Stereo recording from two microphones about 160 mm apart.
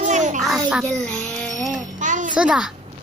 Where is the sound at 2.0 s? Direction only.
50° right (ahead or behind).